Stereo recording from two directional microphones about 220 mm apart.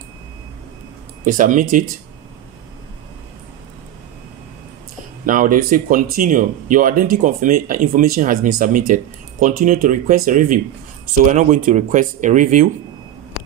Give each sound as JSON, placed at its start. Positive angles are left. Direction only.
{"t": 1.2, "sound": "speech", "side_deg": -35}
{"t": 5.2, "sound": "speech", "side_deg": -40}